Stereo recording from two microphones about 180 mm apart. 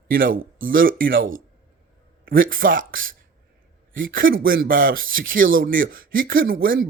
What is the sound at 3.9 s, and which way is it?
Speech, 50° right (ahead or behind).